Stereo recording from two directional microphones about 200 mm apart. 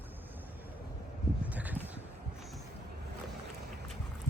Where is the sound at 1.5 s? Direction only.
10° right (ahead or behind).